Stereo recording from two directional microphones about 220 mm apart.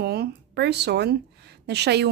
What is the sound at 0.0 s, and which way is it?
Speech, 45° right (ahead or behind).